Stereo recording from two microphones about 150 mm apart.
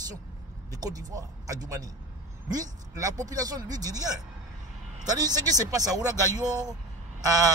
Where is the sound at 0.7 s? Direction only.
25° right (ahead or behind).